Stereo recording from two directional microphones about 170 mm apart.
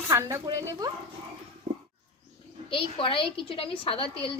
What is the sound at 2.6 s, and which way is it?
A woman's voice, 30° left (ahead or behind).